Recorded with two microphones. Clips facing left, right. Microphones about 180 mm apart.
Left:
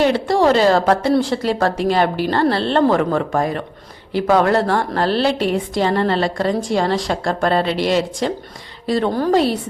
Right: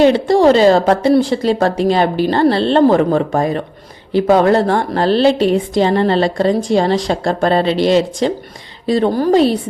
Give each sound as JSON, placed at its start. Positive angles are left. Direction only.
{"t": 0.0, "sound": "a woman's voice", "side_deg": -20}